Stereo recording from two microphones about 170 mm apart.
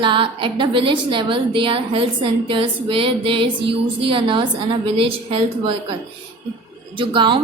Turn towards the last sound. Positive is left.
turn(degrees=-30)  # may be behind; listen again after turning